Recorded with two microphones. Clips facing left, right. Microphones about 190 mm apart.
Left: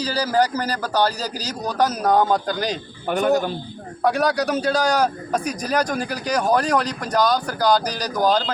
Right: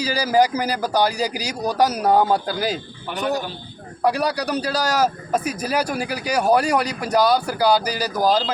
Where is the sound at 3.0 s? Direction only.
50° left (ahead or behind).